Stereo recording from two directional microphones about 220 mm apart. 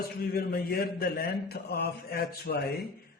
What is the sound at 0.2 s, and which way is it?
Speech, 45° left (ahead or behind).